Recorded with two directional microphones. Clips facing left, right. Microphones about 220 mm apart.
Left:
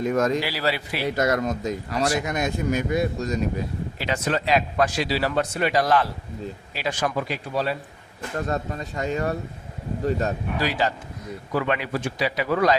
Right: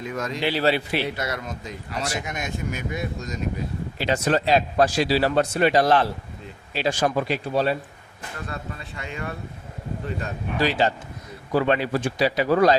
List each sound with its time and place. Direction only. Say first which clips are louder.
0.0 s speech: left 8 dB; 45° left (ahead or behind)
0.4 s speech: right 4 dB; 25° right (ahead or behind)
1.1 s speech: left 8 dB; 45° left (ahead or behind)
3.9 s speech: right 4 dB; 30° right (ahead or behind)
8.4 s speech: left 8 dB; 40° left (ahead or behind)
10.6 s speech: right 4 dB; 25° right (ahead or behind)